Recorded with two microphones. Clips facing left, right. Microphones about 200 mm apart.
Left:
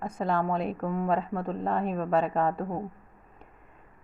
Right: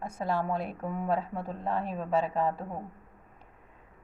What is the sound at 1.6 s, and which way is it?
A woman's voice, 5° right (ahead or behind).